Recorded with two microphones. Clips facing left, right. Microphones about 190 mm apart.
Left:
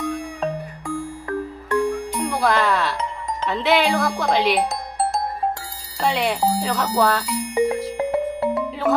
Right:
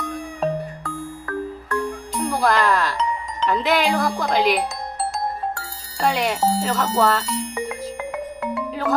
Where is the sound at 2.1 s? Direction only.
Centre (ahead or behind).